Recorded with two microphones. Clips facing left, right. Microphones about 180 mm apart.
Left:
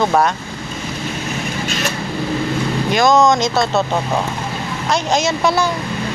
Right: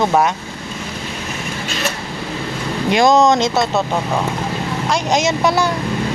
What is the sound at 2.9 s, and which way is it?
Speech, 30° right (ahead or behind).